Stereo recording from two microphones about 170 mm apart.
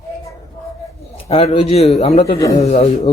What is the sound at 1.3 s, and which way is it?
A man's voice, 35° left (ahead or behind).